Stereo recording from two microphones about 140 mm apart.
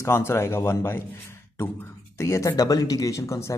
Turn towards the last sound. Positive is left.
turn(degrees=20)  # may be behind; listen again after turning